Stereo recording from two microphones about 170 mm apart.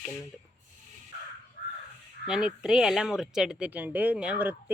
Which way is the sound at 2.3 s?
5° right (ahead or behind).